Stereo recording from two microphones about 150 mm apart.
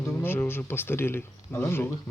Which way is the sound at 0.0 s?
15° left (ahead or behind).